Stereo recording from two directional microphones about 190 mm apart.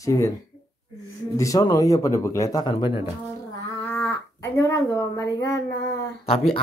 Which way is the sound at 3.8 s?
10° left (ahead or behind).